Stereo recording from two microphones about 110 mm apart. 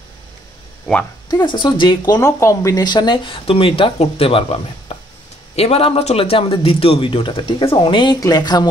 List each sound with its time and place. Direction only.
1.3 s speech: 45° left (ahead or behind)
2.1 s a man's voice: 25° left (ahead or behind); by 8.2 s 45° left (ahead or behind)
8.2 s speech: 35° left (ahead or behind)